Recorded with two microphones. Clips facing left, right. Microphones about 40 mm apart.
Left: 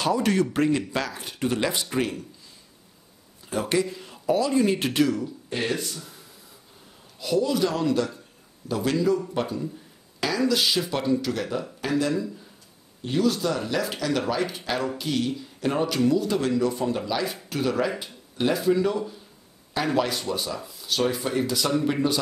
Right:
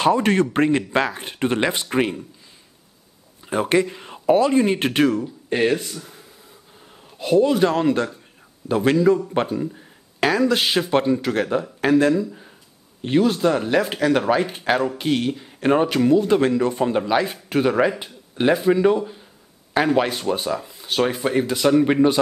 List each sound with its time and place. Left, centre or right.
0.0 s speech: right
3.4 s speech: right
7.2 s speech: right